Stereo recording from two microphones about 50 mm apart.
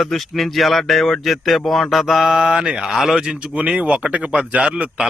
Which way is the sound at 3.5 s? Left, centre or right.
Right.